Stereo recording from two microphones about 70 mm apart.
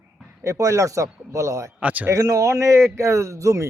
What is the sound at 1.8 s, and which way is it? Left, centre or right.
Speech, right.